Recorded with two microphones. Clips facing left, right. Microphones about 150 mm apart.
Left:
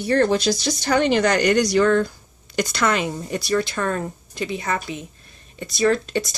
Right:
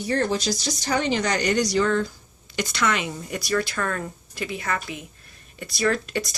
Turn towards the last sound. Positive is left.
turn(degrees=25)  # may be behind; listen again after turning